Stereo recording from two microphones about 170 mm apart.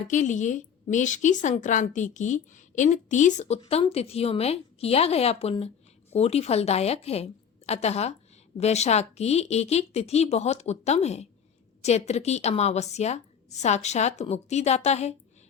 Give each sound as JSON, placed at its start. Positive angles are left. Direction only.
{"t": 0.1, "sound": "a woman's voice", "side_deg": 45}